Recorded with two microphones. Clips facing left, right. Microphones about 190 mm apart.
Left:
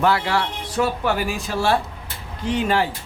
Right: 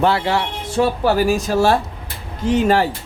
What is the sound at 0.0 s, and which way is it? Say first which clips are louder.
Speech: right 2 dB; 25° right (ahead or behind).